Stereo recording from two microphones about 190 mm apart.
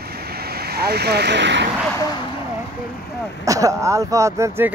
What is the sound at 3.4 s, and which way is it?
Speech, 15° right (ahead or behind).